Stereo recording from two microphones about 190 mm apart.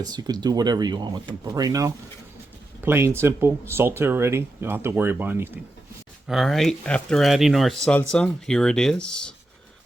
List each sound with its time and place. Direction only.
0.0 s speech: 20° right (ahead or behind)
6.2 s speech: centre (ahead or behind)